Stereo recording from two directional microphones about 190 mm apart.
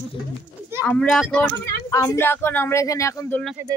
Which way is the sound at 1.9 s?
15° left (ahead or behind).